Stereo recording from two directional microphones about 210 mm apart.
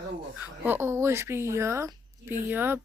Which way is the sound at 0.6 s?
10° right (ahead or behind).